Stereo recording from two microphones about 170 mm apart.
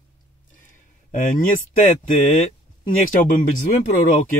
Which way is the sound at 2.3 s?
50° left (ahead or behind).